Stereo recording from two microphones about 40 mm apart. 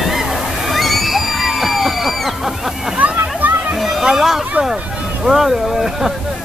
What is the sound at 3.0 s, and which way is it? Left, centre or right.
Splash, right.